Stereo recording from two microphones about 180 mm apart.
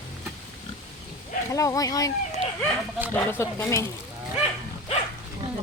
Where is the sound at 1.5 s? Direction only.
20° left (ahead or behind).